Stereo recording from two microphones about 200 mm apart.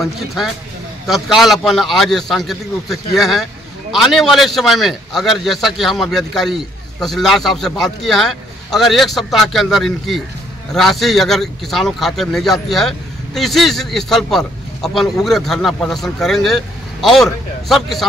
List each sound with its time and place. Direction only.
0.0 s speech: centre (ahead or behind)